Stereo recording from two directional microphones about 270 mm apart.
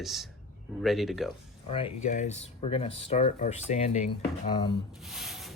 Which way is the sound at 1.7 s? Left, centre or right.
Centre.